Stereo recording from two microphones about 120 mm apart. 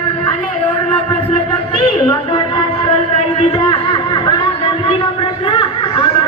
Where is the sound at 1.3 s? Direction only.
45° left (ahead or behind).